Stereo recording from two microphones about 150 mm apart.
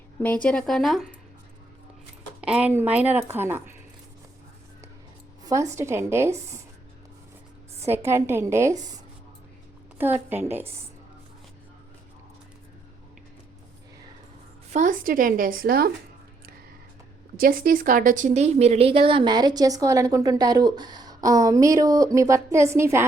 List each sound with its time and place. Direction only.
0.2 s speech: 10° left (ahead or behind)
2.4 s speech: 10° right (ahead or behind)
5.4 s speech: 20° right (ahead or behind)
7.8 s speech: 15° right (ahead or behind)
10.0 s speech: 15° right (ahead or behind)
14.7 s speech: 55° right (ahead or behind); by 15.9 s 80° right
17.3 s a woman's voice: 75° right (ahead or behind); by 23.0 s 20° right (ahead or behind)